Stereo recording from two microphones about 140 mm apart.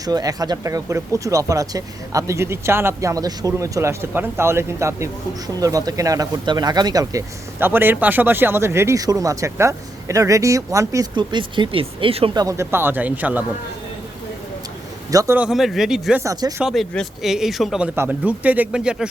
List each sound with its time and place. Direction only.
0.0 s speech: 25° right (ahead or behind)
11.1 s speech: 35° right (ahead or behind)
12.4 s speech: 20° right (ahead or behind)
15.1 s speech: 25° right (ahead or behind)
15.4 s speech: 5° right (ahead or behind)
16.2 s speech: 25° right (ahead or behind)
16.6 s speech: centre (ahead or behind)